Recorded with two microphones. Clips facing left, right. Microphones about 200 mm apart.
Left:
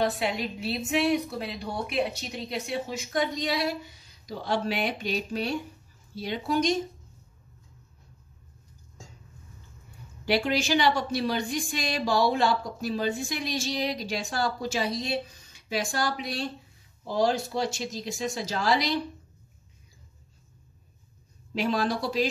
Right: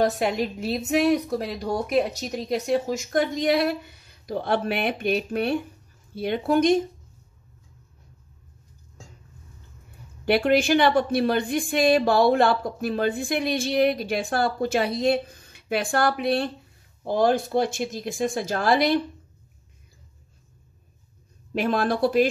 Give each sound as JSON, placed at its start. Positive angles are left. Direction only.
{"t": 0.0, "sound": "a woman's voice", "side_deg": -45}
{"t": 10.2, "sound": "a woman's voice", "side_deg": -55}
{"t": 21.5, "sound": "a woman's voice", "side_deg": -55}